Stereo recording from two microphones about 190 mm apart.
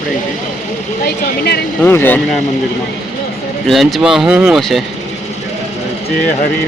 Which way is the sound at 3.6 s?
Centre (ahead or behind).